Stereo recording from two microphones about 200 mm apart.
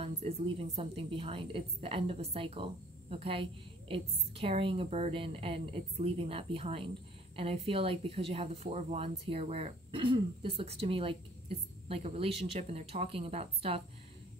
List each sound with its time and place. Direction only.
0.0 s speech: 30° right (ahead or behind)